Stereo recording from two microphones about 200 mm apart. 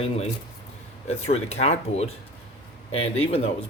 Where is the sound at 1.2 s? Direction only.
30° left (ahead or behind).